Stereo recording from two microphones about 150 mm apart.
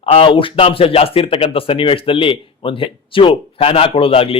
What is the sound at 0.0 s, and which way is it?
Speech, 35° left (ahead or behind).